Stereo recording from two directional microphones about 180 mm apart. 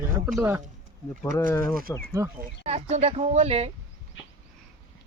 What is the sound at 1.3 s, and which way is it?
Speech, 15° left (ahead or behind).